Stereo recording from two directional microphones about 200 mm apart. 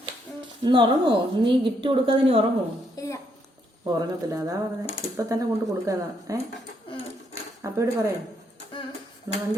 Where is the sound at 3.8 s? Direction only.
15° right (ahead or behind).